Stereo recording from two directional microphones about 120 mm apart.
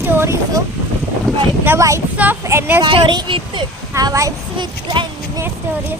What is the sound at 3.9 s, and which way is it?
Speech, 25° right (ahead or behind).